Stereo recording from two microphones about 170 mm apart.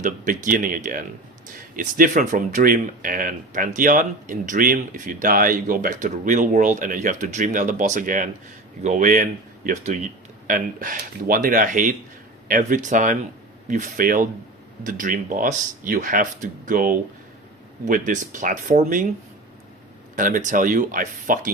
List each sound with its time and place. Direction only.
0.0 s speech: 50° right (ahead or behind)
10.4 s speech: 50° right (ahead or behind)
20.1 s speech: 50° right (ahead or behind)